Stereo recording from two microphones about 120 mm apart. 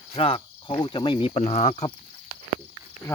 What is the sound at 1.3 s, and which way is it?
Speech, 65° left (ahead or behind).